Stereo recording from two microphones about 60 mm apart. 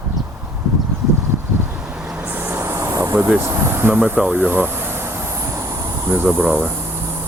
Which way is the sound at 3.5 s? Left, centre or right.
Right.